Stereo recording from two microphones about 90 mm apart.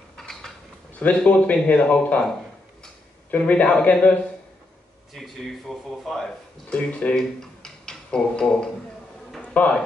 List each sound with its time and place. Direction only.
0.9 s a man's voice: 15° left (ahead or behind)
5.1 s speech: centre (ahead or behind)
6.7 s speech: 10° left (ahead or behind)
9.4 s a sound: 15° left (ahead or behind)